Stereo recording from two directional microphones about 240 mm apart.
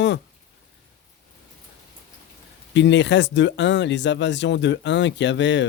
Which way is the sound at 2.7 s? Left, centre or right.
Left.